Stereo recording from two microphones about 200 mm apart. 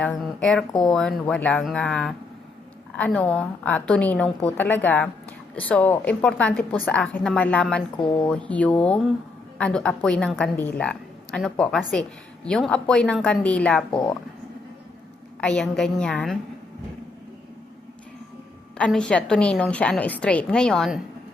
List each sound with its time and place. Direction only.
0.0 s a woman's voice: 5° left (ahead or behind)
7.9 s speech: 25° left (ahead or behind)
8.4 s a woman's voice: 5° left (ahead or behind)
15.4 s a woman's voice: 5° left (ahead or behind)
18.8 s a woman's voice: 5° left (ahead or behind)